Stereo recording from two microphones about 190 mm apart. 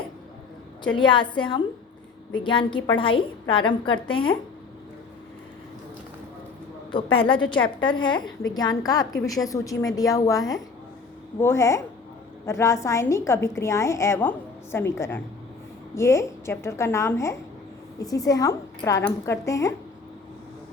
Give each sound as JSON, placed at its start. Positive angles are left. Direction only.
{"t": 0.9, "sound": "a woman's voice", "side_deg": 25}
{"t": 6.9, "sound": "a woman's voice", "side_deg": 25}